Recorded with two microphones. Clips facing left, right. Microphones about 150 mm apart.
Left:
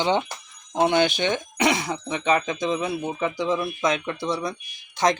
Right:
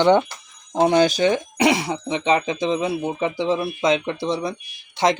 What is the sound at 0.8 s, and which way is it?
Speech, 40° right (ahead or behind).